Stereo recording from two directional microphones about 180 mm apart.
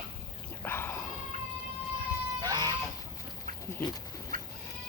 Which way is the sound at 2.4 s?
20° right (ahead or behind).